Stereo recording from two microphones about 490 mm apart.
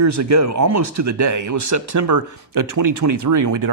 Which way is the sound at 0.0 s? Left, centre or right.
Right.